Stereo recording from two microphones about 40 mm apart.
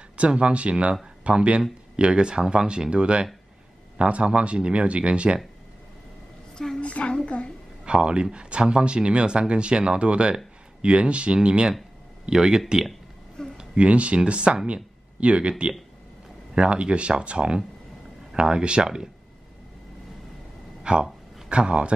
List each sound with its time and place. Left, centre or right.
0.2 s speech: right
6.8 s a woman's voice: left
7.8 s speech: right
13.4 s a sound: centre
13.7 s speech: right
20.8 s a sound: right